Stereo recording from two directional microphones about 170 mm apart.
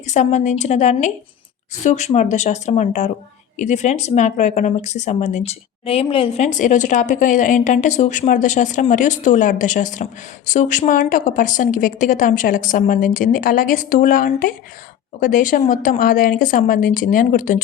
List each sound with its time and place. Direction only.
0.0 s speech: 45° left (ahead or behind)